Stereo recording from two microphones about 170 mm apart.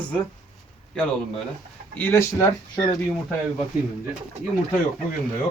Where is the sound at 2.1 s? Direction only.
15° left (ahead or behind).